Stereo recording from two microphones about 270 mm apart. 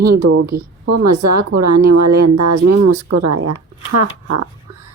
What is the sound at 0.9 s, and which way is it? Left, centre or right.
A woman's voice, right.